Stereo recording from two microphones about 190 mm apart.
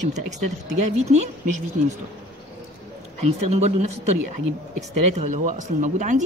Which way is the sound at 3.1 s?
35° right (ahead or behind).